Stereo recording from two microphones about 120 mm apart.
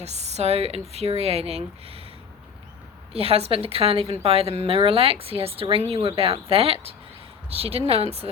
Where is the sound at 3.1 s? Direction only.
55° right (ahead or behind).